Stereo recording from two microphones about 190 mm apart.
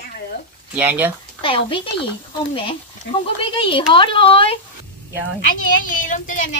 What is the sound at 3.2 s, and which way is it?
A woman's voice, 30° left (ahead or behind).